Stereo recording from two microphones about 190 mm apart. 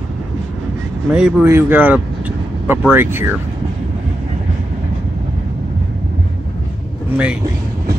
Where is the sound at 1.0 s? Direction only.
5° right (ahead or behind).